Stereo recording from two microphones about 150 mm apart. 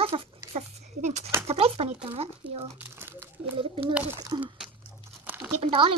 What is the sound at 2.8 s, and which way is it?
Crumpling, 15° right (ahead or behind).